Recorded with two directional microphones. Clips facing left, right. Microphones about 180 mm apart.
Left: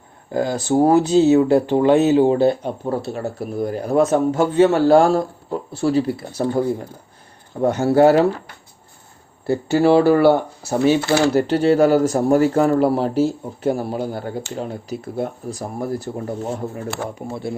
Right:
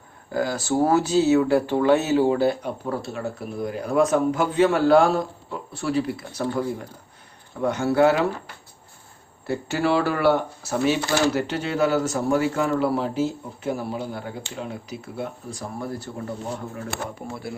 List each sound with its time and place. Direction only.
0.3 s speech: 20° left (ahead or behind)
3.1 s a man's voice: 40° left (ahead or behind)
9.5 s a man's voice: 30° left (ahead or behind)